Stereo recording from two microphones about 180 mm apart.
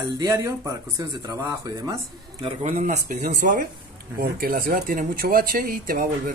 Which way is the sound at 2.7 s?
50° right (ahead or behind).